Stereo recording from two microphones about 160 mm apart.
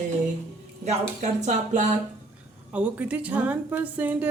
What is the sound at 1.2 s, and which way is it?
Speech, 50° right (ahead or behind).